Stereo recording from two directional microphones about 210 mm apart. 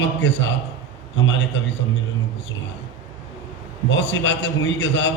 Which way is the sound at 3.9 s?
60° left (ahead or behind).